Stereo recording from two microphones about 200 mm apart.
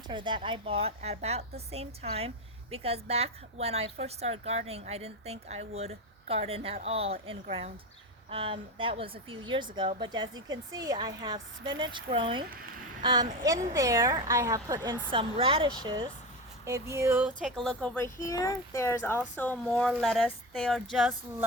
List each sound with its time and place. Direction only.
0.1 s a woman's voice: 25° right (ahead or behind)
16.9 s speech: 10° right (ahead or behind); by 20.7 s 5° left (ahead or behind)